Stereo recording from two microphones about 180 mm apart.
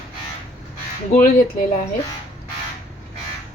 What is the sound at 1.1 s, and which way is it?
Speech, 50° left (ahead or behind).